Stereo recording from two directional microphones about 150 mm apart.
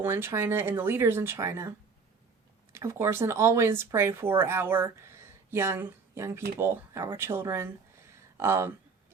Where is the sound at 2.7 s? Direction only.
20° right (ahead or behind).